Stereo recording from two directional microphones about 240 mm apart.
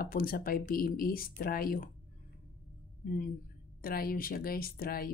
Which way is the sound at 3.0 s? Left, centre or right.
Left.